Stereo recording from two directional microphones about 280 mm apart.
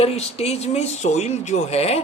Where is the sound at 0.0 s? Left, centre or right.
Left.